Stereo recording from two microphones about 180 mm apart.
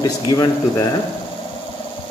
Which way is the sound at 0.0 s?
20° left (ahead or behind).